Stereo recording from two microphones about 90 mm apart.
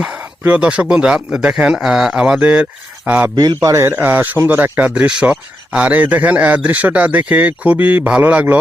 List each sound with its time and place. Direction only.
0.0 s speech: 10° right (ahead or behind)
3.3 s a man's voice: 50° right (ahead or behind)
3.8 s speech: 25° right (ahead or behind)